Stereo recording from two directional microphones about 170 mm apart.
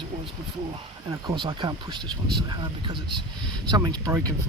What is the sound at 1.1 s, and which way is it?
Speech, 20° right (ahead or behind).